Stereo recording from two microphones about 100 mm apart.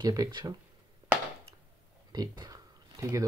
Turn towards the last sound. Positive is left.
turn(degrees=-35)  # may be behind; listen again after turning